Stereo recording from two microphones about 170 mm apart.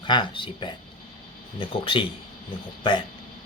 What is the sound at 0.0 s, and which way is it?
Speech, 30° left (ahead or behind).